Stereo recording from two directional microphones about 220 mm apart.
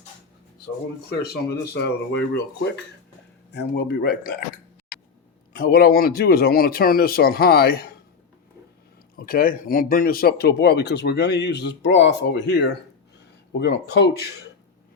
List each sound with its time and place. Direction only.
1.7 s speech: 50° left (ahead or behind)
5.5 s speech: 45° left (ahead or behind)
9.1 s speech: 40° left (ahead or behind)